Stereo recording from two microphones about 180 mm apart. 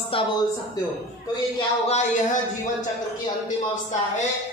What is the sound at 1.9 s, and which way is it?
Speech, 40° left (ahead or behind).